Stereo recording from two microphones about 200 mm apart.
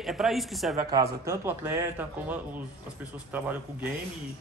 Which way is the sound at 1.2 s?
15° right (ahead or behind).